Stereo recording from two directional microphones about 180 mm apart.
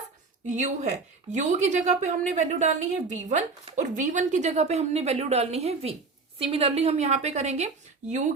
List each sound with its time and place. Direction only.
0.4 s a woman's voice: 45° right (ahead or behind)